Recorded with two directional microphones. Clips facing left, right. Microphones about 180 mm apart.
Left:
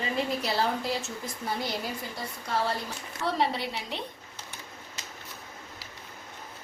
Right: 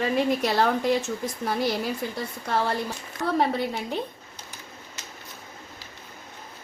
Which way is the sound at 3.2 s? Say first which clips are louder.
Right 4 dB; 50° right (ahead or behind).